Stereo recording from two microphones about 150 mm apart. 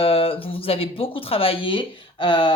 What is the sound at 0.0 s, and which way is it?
Speech, 40° left (ahead or behind).